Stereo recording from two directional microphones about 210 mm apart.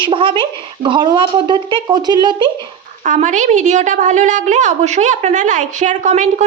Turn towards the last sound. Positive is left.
turn(degrees=-35)  # may be behind; listen again after turning